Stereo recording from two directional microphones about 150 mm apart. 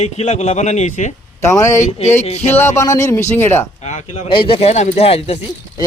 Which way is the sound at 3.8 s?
50° left (ahead or behind).